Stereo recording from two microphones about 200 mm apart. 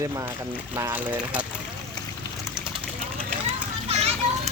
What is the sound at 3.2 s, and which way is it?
Children playing, 30° right (ahead or behind).